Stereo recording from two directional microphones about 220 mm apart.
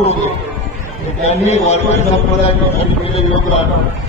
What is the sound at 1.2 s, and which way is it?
Speech, 30° left (ahead or behind).